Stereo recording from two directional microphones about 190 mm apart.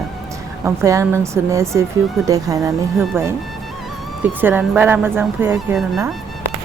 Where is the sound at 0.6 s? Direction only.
15° right (ahead or behind).